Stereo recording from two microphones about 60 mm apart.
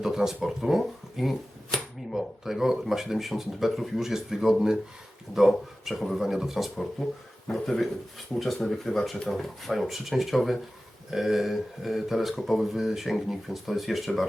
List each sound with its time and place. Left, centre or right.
0.0 s speech: centre
7.0 s speech: centre